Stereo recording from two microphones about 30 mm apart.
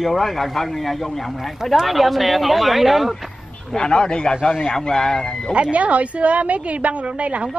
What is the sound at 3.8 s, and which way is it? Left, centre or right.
Speech, left.